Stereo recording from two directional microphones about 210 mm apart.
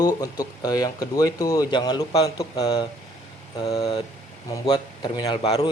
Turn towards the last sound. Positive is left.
turn(degrees=30)  # may be behind; listen again after turning